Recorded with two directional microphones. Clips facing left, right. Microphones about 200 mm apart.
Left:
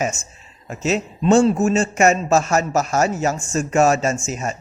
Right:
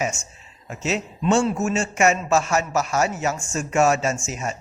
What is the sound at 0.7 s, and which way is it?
A man's voice, 40° left (ahead or behind).